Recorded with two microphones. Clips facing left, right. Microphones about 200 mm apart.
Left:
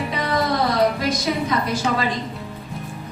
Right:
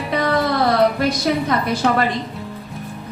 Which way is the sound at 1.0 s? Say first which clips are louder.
Right 3 dB; 60° right (ahead or behind).